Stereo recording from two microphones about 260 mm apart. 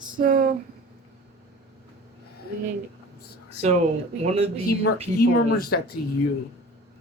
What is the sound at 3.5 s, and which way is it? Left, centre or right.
Speech, right.